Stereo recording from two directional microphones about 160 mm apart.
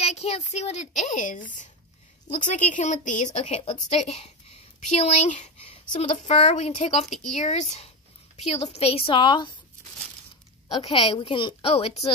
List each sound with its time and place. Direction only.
0.0 s a woman's voice: 40° left (ahead or behind)
3.4 s a woman's voice: 40° left (ahead or behind)
10.7 s a woman's voice: 35° left (ahead or behind)